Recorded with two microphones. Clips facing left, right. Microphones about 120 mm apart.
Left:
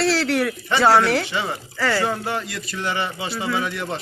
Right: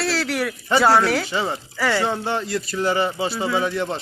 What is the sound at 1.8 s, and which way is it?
A man's voice, 15° right (ahead or behind).